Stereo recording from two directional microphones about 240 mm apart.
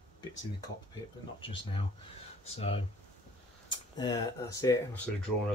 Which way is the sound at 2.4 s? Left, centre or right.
Left.